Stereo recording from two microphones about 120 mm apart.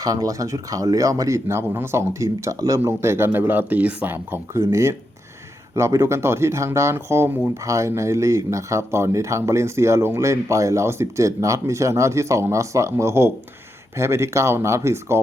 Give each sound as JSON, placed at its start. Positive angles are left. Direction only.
{"t": 0.0, "sound": "speech", "side_deg": -30}